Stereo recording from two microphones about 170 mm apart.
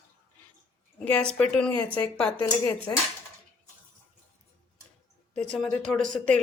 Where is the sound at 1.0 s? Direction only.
5° left (ahead or behind).